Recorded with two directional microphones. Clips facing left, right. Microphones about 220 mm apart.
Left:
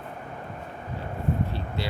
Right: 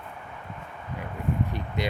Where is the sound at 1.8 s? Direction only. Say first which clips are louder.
Right 4 dB; 20° right (ahead or behind).